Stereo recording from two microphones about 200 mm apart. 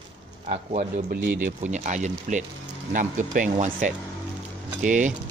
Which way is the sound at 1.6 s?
35° right (ahead or behind).